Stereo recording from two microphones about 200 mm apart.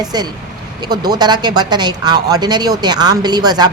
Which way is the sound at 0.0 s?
20° right (ahead or behind).